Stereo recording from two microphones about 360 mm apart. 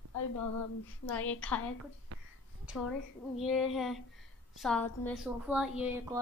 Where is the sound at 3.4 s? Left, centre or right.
Centre.